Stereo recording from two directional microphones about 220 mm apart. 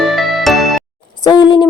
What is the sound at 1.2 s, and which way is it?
Speech, 20° left (ahead or behind).